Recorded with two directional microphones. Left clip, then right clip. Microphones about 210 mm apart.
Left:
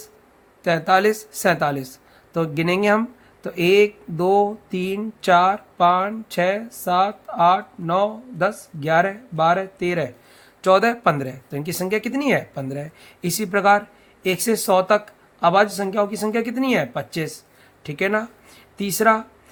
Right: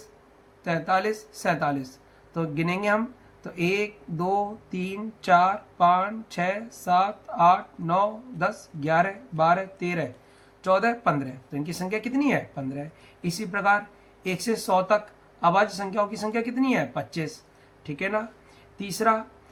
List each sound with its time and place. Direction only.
0.6 s speech: 45° left (ahead or behind)